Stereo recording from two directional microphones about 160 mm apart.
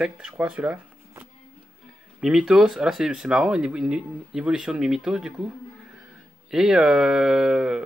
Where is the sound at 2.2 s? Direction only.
5° right (ahead or behind).